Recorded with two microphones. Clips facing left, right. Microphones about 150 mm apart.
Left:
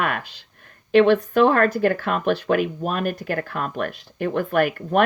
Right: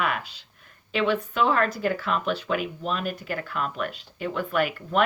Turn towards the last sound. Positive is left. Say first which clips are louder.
# left 5 dB
turn(degrees=50)  # may be behind; listen again after turning